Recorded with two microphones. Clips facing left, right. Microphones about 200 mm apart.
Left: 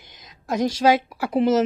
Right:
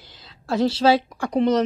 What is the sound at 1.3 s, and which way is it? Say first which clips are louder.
Speech: even; 5° left (ahead or behind).